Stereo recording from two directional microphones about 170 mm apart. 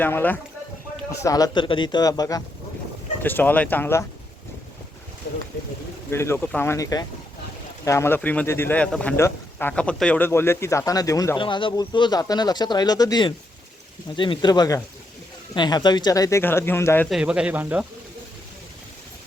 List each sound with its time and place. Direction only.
0.0 s speech: 10° left (ahead or behind)
3.2 s speech: 10° left (ahead or behind)
6.1 s speech: 15° left (ahead or behind)
17.1 s speech: 5° right (ahead or behind)